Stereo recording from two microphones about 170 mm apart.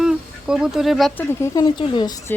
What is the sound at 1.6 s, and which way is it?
Speech, 25° left (ahead or behind).